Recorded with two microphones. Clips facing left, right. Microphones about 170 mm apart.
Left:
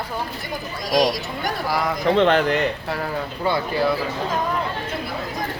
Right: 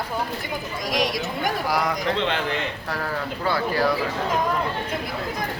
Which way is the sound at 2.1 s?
55° left (ahead or behind).